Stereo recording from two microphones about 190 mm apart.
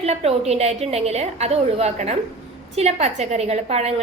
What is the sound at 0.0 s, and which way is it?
A woman's voice, 35° right (ahead or behind).